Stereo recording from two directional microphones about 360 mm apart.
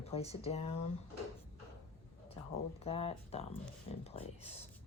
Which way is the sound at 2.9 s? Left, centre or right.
Centre.